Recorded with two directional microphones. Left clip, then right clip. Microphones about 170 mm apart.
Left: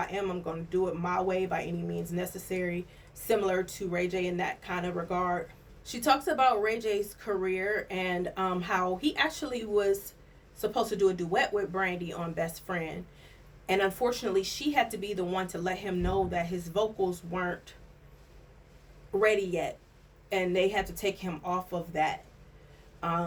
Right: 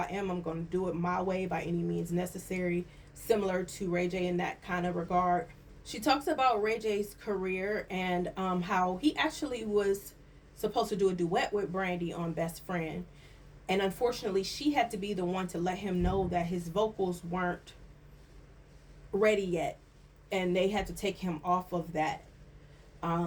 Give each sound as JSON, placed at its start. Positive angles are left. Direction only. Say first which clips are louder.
{"t": 0.0, "sound": "a woman's voice", "louder": "left 2 dB", "side_deg": 20}
{"t": 19.2, "sound": "a woman's voice", "louder": "left 1 dB", "side_deg": 20}
{"t": 23.0, "sound": "a sound", "louder": "left 3 dB", "side_deg": 25}